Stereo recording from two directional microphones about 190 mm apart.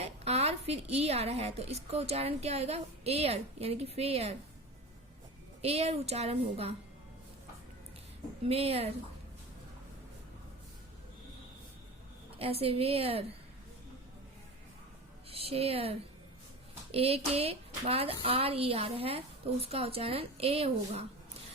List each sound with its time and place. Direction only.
0.0 s a woman's voice: 35° right (ahead or behind)
5.6 s a woman's voice: 30° right (ahead or behind)
8.4 s a woman's voice: 30° right (ahead or behind)
12.4 s a woman's voice: 30° right (ahead or behind)
15.3 s a woman's voice: 30° right (ahead or behind)